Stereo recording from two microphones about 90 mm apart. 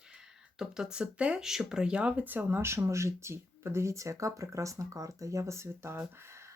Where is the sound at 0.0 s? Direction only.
5° right (ahead or behind).